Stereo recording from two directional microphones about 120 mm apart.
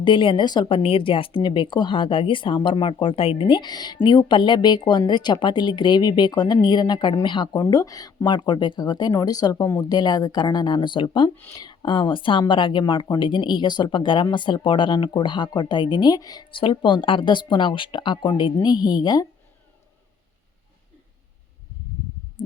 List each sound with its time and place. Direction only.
0.0 s a woman's voice: 45° left (ahead or behind)
0.8 s speech: 50° left (ahead or behind)
22.4 s heart sounds: 45° left (ahead or behind)